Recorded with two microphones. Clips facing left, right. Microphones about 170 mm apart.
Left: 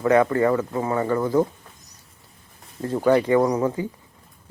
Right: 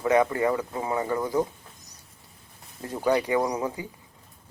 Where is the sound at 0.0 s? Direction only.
15° right (ahead or behind).